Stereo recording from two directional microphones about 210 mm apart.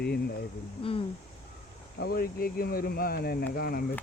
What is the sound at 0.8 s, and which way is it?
Speech, 25° left (ahead or behind).